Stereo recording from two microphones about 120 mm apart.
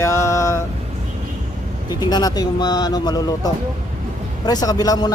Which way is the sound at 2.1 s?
35° left (ahead or behind).